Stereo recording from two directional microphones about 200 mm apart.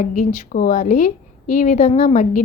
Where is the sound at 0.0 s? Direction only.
40° left (ahead or behind).